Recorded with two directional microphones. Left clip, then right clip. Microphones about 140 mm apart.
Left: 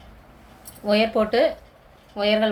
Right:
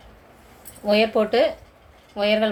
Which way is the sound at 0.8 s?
5° right (ahead or behind).